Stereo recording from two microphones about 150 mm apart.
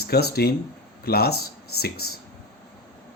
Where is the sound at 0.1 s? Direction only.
90° left.